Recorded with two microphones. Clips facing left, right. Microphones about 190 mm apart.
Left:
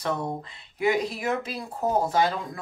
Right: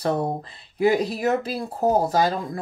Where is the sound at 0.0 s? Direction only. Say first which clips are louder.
Right 5 dB; 30° right (ahead or behind).